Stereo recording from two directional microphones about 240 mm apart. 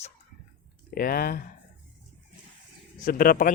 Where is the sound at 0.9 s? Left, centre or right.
Left.